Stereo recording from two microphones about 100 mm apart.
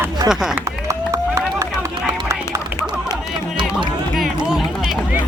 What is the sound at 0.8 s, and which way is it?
Run, 30° right (ahead or behind).